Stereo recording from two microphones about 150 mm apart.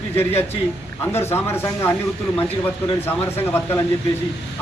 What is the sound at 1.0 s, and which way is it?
Speech, 15° left (ahead or behind).